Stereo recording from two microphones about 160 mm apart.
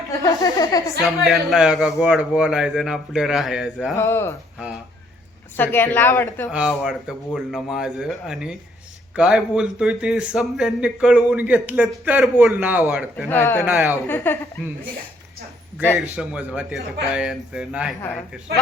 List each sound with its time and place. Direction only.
0.1 s speech: 20° left (ahead or behind)
1.0 s a man's voice: centre (ahead or behind)
3.9 s speech: 15° left (ahead or behind)
5.5 s speech: 10° left (ahead or behind)
6.5 s a man's voice: 5° right (ahead or behind)
13.2 s speech: 15° left (ahead or behind)
13.7 s a man's voice: 5° right (ahead or behind)
14.3 s speech: 15° left (ahead or behind)
16.0 s a man's voice: 5° right (ahead or behind)